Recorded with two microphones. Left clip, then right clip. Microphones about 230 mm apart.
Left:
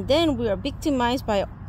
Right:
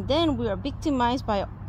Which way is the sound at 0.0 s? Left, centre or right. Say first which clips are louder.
Left 3 dB; left.